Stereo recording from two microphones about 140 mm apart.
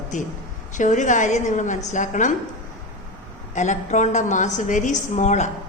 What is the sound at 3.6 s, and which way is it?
A woman's voice, 60° left (ahead or behind).